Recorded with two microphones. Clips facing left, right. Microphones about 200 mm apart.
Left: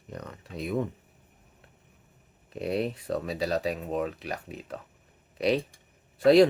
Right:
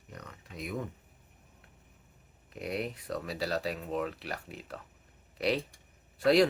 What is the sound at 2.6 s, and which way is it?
Speech, 30° left (ahead or behind).